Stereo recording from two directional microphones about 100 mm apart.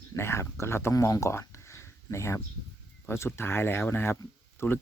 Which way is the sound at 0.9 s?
30° left (ahead or behind).